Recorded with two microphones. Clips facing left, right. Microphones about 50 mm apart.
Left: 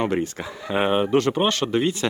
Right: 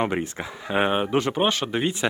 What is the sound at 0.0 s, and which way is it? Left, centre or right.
Speech, right.